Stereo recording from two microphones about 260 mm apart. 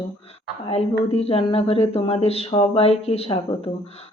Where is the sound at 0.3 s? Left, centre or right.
Left.